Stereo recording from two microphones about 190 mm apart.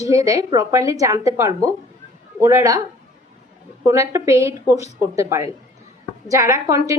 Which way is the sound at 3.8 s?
15° right (ahead or behind).